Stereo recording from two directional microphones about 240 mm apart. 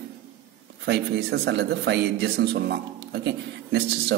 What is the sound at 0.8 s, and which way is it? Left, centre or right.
A man's voice, right.